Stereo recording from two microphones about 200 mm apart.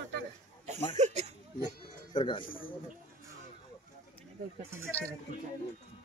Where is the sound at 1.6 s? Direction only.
20° left (ahead or behind).